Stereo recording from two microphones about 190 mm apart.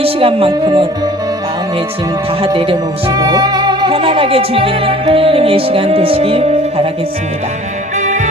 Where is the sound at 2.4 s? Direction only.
25° right (ahead or behind).